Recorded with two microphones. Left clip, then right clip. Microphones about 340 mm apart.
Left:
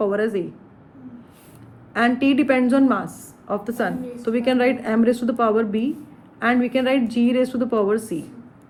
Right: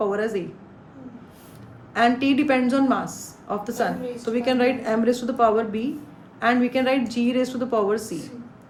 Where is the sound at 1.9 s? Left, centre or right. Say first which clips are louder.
Left 1 dB; left.